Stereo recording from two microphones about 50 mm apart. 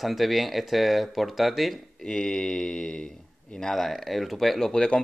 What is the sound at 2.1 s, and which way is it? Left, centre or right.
Speech, centre.